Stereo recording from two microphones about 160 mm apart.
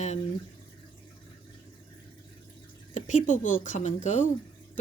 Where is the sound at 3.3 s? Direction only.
55° left (ahead or behind).